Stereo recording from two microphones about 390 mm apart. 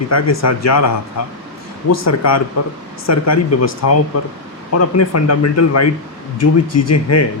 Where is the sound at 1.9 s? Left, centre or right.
Left.